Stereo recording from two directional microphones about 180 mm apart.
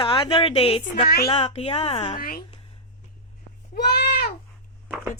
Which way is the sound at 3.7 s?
60° left (ahead or behind).